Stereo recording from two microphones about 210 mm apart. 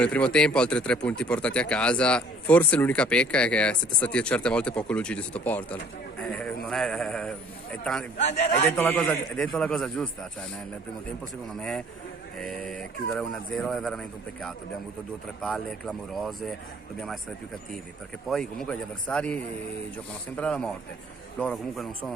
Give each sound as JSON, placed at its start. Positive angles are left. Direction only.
{"t": 0.0, "sound": "a man's voice", "side_deg": 5}
{"t": 8.2, "sound": "a man's voice", "side_deg": 30}
{"t": 8.7, "sound": "speech", "side_deg": 5}
{"t": 12.4, "sound": "speech", "side_deg": 5}
{"t": 18.3, "sound": "a man's voice", "side_deg": 0}